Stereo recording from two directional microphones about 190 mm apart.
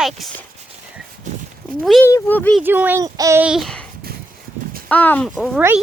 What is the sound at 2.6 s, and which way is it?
Speech, 10° right (ahead or behind).